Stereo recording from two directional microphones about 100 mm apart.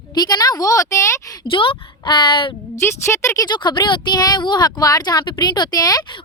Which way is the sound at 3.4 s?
50° left (ahead or behind).